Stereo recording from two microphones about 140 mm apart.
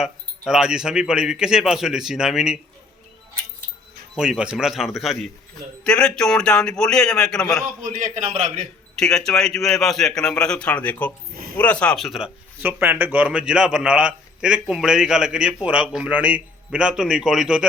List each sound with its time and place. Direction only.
0.0 s speech: 5° right (ahead or behind)
4.2 s speech: 5° right (ahead or behind)
7.8 s a man's voice: 70° right (ahead or behind)
9.0 s speech: 5° left (ahead or behind)
12.6 s a man's voice: 15° right (ahead or behind)